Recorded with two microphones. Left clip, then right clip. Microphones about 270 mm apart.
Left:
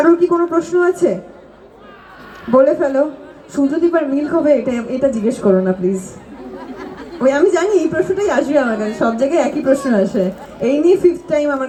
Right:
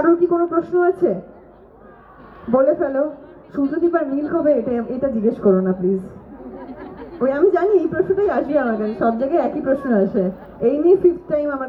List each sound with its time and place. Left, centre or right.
0.0 s a woman's voice: left
2.5 s a woman's voice: left